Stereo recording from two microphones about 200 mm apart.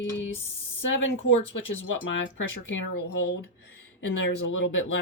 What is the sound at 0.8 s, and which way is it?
Speech, 75° left (ahead or behind).